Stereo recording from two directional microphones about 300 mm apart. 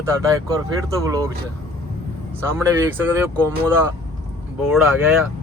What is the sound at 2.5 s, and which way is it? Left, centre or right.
Speech, centre.